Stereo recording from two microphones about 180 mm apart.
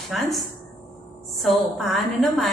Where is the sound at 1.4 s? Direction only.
Centre (ahead or behind).